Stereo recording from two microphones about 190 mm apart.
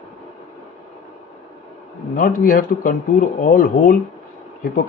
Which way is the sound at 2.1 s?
45° left (ahead or behind).